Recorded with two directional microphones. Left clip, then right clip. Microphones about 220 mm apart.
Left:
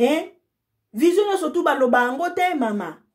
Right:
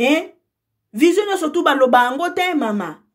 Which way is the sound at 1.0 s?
30° right (ahead or behind).